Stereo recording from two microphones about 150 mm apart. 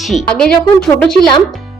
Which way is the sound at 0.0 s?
Centre (ahead or behind).